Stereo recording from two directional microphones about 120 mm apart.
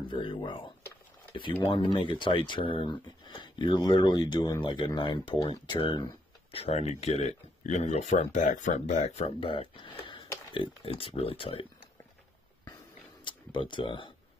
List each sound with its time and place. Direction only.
0.1 s speech: 45° left (ahead or behind)
6.6 s speech: 60° left (ahead or behind)
9.4 s speech: 45° left (ahead or behind)
13.2 s speech: 40° left (ahead or behind)